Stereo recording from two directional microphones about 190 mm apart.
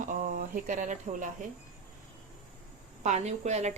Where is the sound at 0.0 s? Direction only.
45° right (ahead or behind).